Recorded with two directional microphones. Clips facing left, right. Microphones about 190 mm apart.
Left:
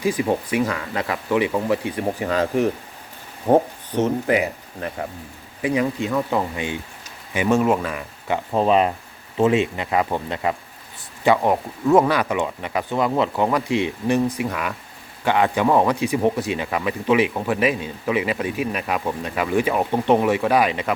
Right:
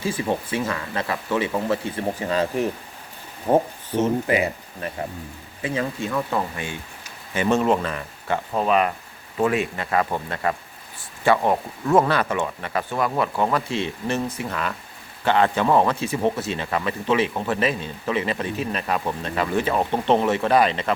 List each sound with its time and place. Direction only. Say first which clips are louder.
0.0 s speech: left 4 dB; 15° left (ahead or behind)
5.6 s speech: left 5 dB; 15° left (ahead or behind)
7.3 s speech: left 1 dB; 5° left (ahead or behind)
8.5 s speech: left 3 dB; 30° left (ahead or behind); by 20.9 s 10° left (ahead or behind)